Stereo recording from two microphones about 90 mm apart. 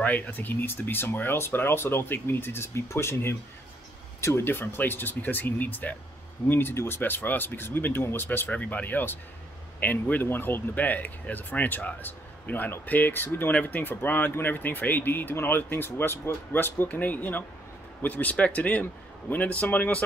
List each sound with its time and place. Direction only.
0.0 s a man's voice: 20° left (ahead or behind)